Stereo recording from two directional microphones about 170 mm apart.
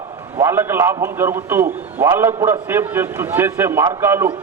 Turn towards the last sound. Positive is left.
turn(degrees=-15)  # may be behind; listen again after turning